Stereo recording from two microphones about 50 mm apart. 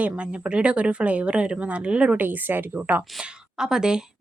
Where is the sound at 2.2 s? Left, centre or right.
Right.